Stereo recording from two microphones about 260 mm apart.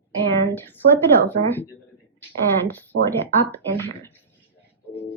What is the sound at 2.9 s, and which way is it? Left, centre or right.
Speech, right.